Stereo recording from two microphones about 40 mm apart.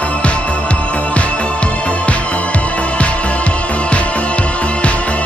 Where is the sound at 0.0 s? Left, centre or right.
Left.